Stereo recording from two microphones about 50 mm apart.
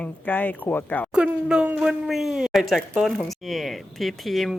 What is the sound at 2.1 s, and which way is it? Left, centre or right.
Speech, centre.